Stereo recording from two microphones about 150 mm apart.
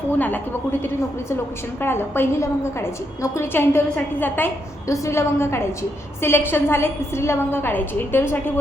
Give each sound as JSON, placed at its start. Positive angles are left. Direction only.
{"t": 0.2, "sound": "a woman's voice", "side_deg": 10}